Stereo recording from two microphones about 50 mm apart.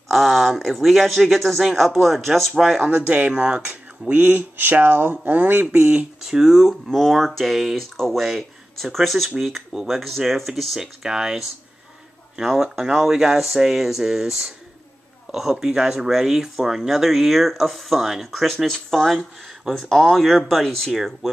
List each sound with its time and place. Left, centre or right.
0.1 s speech: centre
2.8 s speech: right
4.1 s speech: right
5.7 s speech: right
6.2 s speech: centre
10.8 s speech: centre